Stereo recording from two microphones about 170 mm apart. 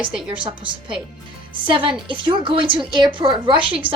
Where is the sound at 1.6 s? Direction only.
30° right (ahead or behind).